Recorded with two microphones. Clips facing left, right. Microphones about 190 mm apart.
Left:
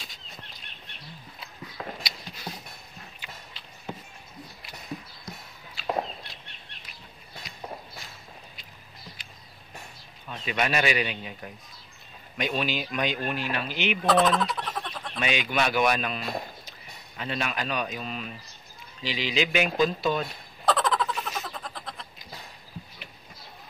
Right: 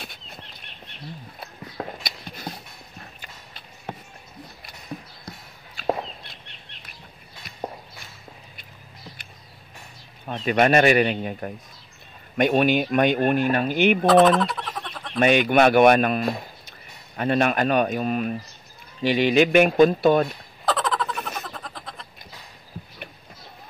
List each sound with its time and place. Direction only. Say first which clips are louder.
0.0 s bird: right 5 dB; 60° right (ahead or behind)
1.4 s a sound: right 5 dB; 50° right (ahead or behind)
3.2 s clip-clop: even; 50° right (ahead or behind)
5.8 s walk: right 7 dB; 55° right (ahead or behind)
10.2 s speech: right 9 dB; 50° right (ahead or behind)
14.3 s a sound: right 4 dB; centre (ahead or behind)
15.1 s speech: right 10 dB; 55° right (ahead or behind)
20.6 s a sound: even; centre (ahead or behind)
21.5 s cat: right 1 dB; centre (ahead or behind)